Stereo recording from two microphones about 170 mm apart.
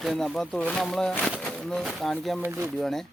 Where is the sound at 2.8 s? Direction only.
Centre (ahead or behind).